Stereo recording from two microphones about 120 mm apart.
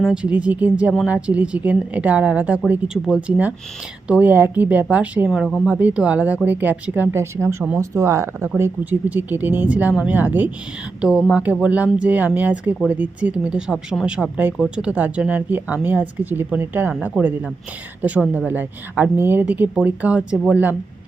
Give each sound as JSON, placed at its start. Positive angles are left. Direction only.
{"t": 0.0, "sound": "speech", "side_deg": -5}
{"t": 11.5, "sound": "speech", "side_deg": -10}